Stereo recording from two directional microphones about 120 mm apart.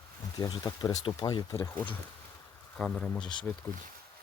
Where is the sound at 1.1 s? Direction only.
40° left (ahead or behind).